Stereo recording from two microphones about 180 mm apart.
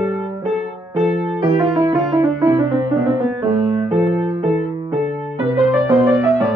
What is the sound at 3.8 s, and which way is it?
Music, centre (ahead or behind).